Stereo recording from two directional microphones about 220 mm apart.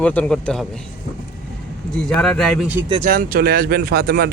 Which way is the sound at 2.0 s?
5° left (ahead or behind).